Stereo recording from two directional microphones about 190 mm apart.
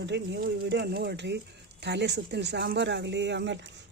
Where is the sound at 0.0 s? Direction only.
65° right (ahead or behind).